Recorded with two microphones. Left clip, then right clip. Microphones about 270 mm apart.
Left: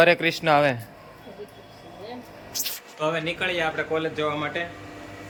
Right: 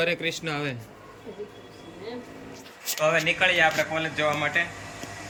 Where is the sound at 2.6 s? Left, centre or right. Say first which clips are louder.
Right 1 dB; centre.